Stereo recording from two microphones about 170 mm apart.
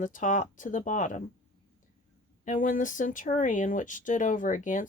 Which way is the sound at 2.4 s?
50° left (ahead or behind).